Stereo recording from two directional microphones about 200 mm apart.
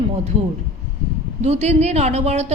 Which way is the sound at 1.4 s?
35° right (ahead or behind).